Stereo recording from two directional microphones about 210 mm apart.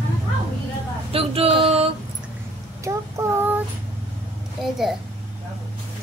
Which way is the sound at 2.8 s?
15° right (ahead or behind).